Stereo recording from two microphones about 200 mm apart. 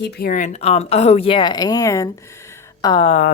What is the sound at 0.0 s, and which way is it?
Speech, 50° left (ahead or behind).